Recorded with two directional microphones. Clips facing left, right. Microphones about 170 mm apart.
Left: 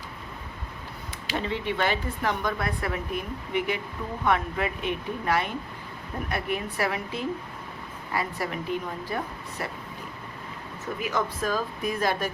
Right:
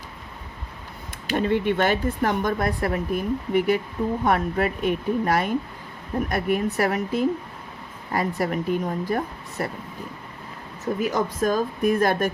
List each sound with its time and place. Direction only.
1.3 s speech: 50° right (ahead or behind)
11.0 s speech: 45° right (ahead or behind)